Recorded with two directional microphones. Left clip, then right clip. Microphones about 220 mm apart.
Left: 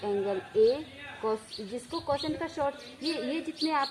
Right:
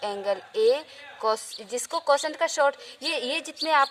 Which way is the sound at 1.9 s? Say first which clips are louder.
Right 8 dB; 40° right (ahead or behind).